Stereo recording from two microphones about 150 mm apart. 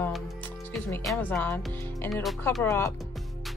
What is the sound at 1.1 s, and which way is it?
Music, 10° left (ahead or behind).